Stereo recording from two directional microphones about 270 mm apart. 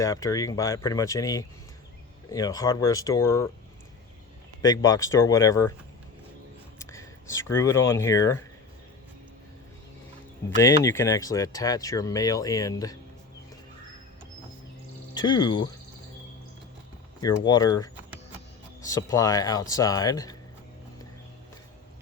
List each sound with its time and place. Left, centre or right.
0.0 s speech: centre
4.6 s speech: centre
6.7 s speech: centre
10.6 s speech: centre
15.1 s speech: centre
17.2 s speech: centre